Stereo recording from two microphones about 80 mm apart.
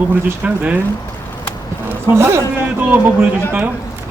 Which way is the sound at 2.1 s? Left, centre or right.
Right.